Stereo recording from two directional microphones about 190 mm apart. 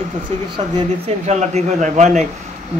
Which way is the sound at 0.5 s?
25° right (ahead or behind).